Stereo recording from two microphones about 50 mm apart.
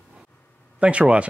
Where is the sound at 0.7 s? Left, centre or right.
Right.